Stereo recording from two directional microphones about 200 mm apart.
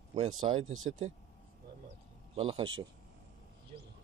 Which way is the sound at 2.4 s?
30° right (ahead or behind).